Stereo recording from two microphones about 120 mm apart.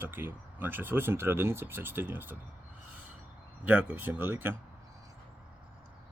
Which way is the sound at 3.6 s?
15° right (ahead or behind).